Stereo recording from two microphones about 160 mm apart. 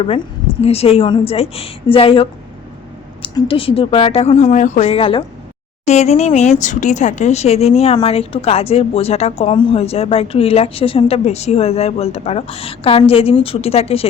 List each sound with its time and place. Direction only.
0.6 s a woman's voice: 40° left (ahead or behind)